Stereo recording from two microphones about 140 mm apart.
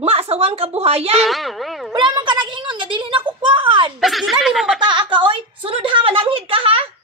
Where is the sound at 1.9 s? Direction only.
35° right (ahead or behind).